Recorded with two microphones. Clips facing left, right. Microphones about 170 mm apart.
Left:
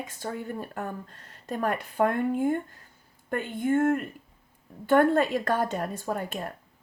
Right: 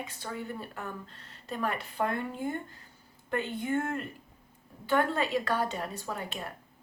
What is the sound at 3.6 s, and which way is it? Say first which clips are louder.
Speech: left 13 dB; 50° left (ahead or behind).